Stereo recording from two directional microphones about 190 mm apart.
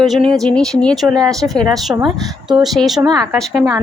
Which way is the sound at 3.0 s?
20° right (ahead or behind).